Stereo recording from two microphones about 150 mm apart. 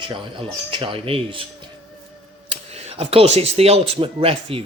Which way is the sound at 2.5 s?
40° right (ahead or behind).